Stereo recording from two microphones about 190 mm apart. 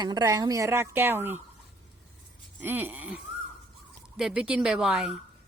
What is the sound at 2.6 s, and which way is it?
A woman's voice, 10° right (ahead or behind).